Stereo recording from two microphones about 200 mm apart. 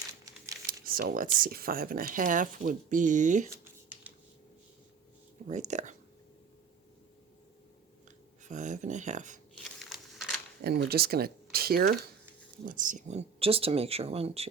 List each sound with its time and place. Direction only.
0.7 s speech: 45° right (ahead or behind)
3.6 s a sound: 10° right (ahead or behind)
5.5 s speech: 35° right (ahead or behind)
8.4 s speech: 35° right (ahead or behind)
9.7 s crumpling: centre (ahead or behind)
10.6 s speech: 50° right (ahead or behind); by 14.4 s 30° right (ahead or behind)